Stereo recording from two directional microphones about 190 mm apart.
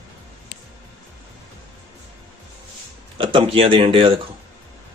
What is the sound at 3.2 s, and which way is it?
Speech, 30° right (ahead or behind).